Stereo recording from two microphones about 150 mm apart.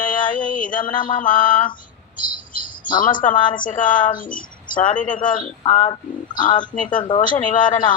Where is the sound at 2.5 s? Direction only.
65° left (ahead or behind).